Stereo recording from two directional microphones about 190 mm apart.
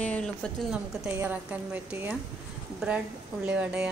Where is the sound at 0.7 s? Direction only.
5° right (ahead or behind).